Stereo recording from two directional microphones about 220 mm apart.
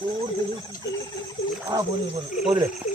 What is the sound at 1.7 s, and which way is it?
Fowl, 20° right (ahead or behind).